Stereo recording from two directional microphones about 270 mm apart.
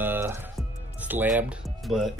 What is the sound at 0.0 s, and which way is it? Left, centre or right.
Music, centre.